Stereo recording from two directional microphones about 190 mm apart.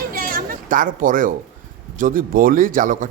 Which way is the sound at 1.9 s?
45° right (ahead or behind).